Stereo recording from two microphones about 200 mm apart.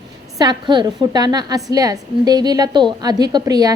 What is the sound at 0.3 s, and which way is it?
A woman's voice, 20° right (ahead or behind).